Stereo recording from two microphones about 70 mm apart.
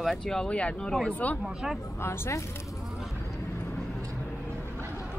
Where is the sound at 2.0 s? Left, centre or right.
Left.